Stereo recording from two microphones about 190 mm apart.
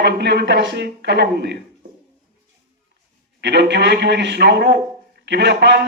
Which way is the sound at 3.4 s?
65° right (ahead or behind).